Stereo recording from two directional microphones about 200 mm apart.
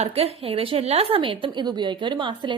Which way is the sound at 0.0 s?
30° right (ahead or behind).